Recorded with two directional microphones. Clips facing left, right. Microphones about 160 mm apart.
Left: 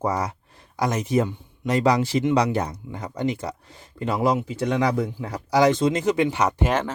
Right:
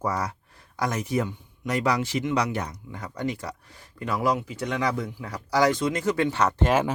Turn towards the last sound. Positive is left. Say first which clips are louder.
# right 1 dB
turn(degrees=-10)  # may be behind; listen again after turning